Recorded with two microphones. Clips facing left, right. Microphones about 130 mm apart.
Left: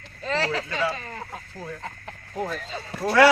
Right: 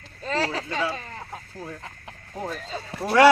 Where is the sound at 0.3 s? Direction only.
40° right (ahead or behind).